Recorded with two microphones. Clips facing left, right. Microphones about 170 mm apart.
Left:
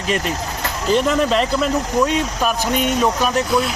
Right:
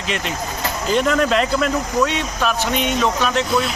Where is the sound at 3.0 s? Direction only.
10° left (ahead or behind).